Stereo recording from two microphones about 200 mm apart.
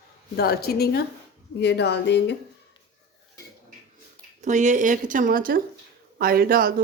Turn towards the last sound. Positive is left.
turn(degrees=-45)  # may be behind; listen again after turning